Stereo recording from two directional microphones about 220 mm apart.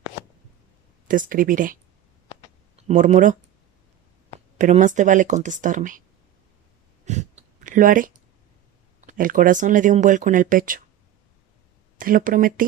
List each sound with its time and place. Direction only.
1.0 s speech: 40° right (ahead or behind)
4.5 s speech: 35° right (ahead or behind)
7.0 s a sound: 30° right (ahead or behind)
9.0 s speech: 35° right (ahead or behind)
11.9 s speech: 40° right (ahead or behind)